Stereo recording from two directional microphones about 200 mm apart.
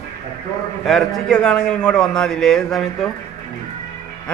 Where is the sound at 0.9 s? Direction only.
Centre (ahead or behind).